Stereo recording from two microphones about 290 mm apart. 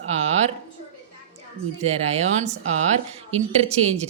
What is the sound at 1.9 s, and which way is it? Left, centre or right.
Speech, right.